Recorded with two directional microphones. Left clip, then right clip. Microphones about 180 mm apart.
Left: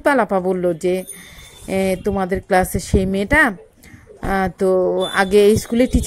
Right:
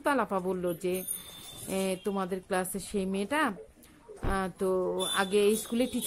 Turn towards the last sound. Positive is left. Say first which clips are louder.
# left 13 dB
turn(degrees=25)  # may be behind; listen again after turning